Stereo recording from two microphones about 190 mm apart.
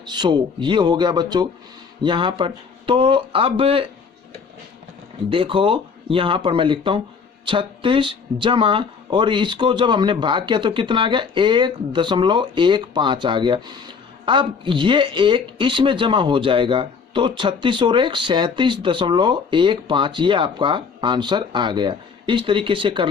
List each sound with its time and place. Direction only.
0.0 s speech: 25° right (ahead or behind)
5.3 s speech: 25° right (ahead or behind)